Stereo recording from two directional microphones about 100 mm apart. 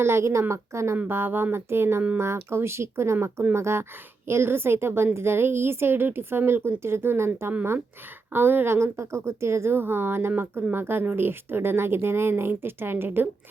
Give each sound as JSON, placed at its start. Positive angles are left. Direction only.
{"t": 0.0, "sound": "a woman's voice", "side_deg": -25}